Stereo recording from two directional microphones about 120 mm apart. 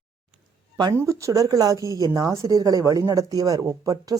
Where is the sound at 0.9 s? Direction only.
25° right (ahead or behind).